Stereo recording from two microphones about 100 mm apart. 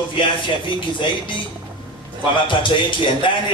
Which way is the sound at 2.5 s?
55° left (ahead or behind).